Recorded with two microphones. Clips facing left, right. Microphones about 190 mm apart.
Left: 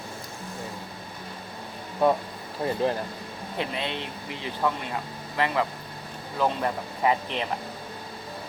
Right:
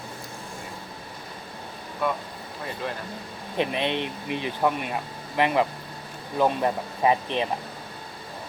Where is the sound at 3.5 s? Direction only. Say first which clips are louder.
Right 5 dB; 20° right (ahead or behind).